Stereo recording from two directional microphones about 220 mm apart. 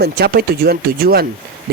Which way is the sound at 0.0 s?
45° right (ahead or behind).